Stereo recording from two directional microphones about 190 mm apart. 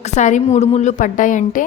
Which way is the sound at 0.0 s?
40° left (ahead or behind).